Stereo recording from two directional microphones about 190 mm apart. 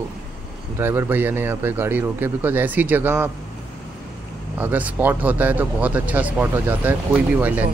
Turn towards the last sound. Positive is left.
turn(degrees=-10)  # may be behind; listen again after turning